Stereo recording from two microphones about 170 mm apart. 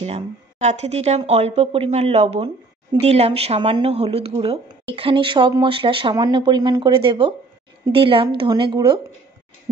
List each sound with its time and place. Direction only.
0.0 s speech: 40° right (ahead or behind)